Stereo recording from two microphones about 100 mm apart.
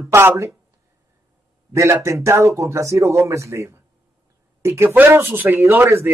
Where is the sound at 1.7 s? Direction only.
25° right (ahead or behind).